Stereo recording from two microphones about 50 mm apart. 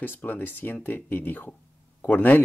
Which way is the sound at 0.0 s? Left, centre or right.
Left.